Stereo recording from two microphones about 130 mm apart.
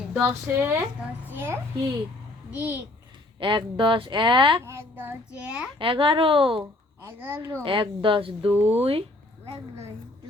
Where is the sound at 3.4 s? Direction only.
40° right (ahead or behind).